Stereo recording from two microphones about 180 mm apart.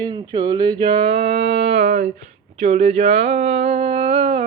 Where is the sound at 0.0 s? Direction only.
25° right (ahead or behind).